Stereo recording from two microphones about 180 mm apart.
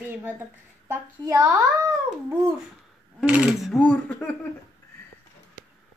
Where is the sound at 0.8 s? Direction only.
20° right (ahead or behind).